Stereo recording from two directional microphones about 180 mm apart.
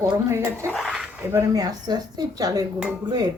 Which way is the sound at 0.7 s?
Centre (ahead or behind).